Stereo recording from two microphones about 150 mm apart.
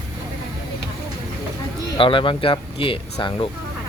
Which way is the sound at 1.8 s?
35° left (ahead or behind).